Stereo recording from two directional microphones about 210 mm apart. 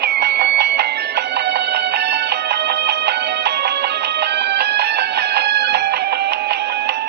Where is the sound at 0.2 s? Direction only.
55° right (ahead or behind).